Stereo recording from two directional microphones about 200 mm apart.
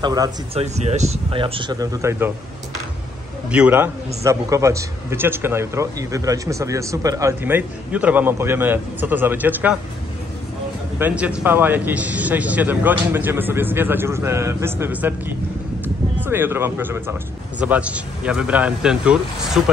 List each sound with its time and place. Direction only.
0.0 s speech: 20° right (ahead or behind)
0.6 s speech: 35° right (ahead or behind); by 2.3 s 10° right (ahead or behind)
3.4 s a man's voice: 5° right (ahead or behind)
11.0 s a man's voice: 10° right (ahead or behind)
15.8 s a sound: 10° right (ahead or behind)
17.6 s a man's voice: 5° right (ahead or behind)